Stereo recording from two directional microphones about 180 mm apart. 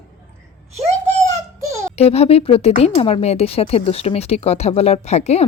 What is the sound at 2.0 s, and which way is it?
Speech, 35° left (ahead or behind).